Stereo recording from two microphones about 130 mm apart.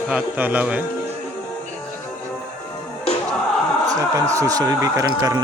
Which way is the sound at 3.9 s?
25° right (ahead or behind).